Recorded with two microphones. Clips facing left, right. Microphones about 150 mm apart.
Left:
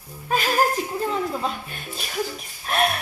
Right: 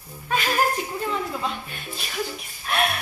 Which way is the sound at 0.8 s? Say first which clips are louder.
Left 3 dB; 35° left (ahead or behind).